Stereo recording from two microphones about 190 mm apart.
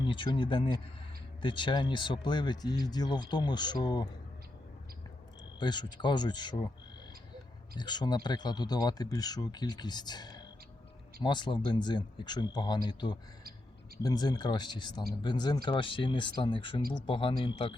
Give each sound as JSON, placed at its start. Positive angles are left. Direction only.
{"t": 0.0, "sound": "speech", "side_deg": 25}
{"t": 5.5, "sound": "speech", "side_deg": 25}
{"t": 7.8, "sound": "speech", "side_deg": 20}